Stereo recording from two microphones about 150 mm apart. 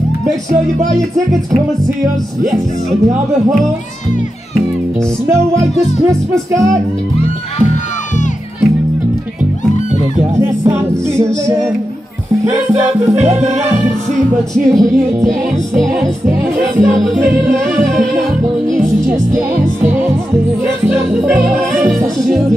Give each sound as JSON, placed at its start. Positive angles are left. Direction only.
{"t": 0.9, "sound": "music", "side_deg": 0}
{"t": 6.3, "sound": "music", "side_deg": -20}
{"t": 10.3, "sound": "music", "side_deg": -20}
{"t": 13.1, "sound": "music", "side_deg": -50}
{"t": 14.5, "sound": "music", "side_deg": 0}
{"t": 16.3, "sound": "music", "side_deg": -15}
{"t": 17.0, "sound": "music", "side_deg": 0}
{"t": 19.3, "sound": "music", "side_deg": -15}
{"t": 21.5, "sound": "music", "side_deg": 0}